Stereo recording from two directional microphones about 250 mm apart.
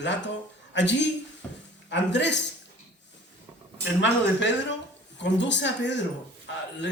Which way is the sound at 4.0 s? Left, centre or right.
Left.